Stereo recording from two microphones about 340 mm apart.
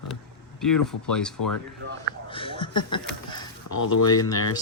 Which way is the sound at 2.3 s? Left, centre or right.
Centre.